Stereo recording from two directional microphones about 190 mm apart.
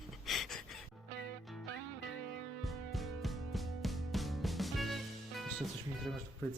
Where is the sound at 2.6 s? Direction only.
Centre (ahead or behind).